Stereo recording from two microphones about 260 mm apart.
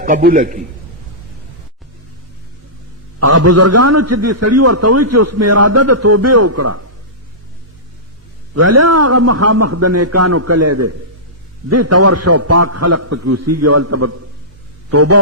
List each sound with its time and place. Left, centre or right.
0.0 s a man's voice: right
3.2 s a man's voice: right
8.5 s a man's voice: right